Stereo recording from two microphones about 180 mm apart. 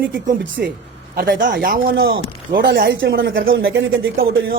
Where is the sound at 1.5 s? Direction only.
55° right (ahead or behind); by 4.1 s 90° right.